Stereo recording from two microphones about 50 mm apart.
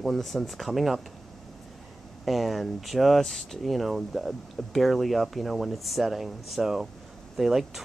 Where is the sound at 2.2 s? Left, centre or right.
Centre.